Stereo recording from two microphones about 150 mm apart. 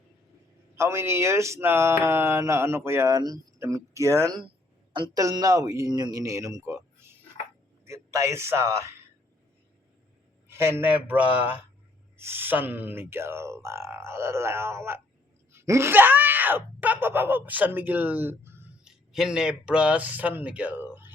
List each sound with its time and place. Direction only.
0.8 s a man's voice: 15° right (ahead or behind)
10.5 s speech: 15° right (ahead or behind)
18.9 s speech: 5° right (ahead or behind)